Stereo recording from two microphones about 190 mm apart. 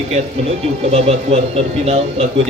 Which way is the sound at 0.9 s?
35° right (ahead or behind).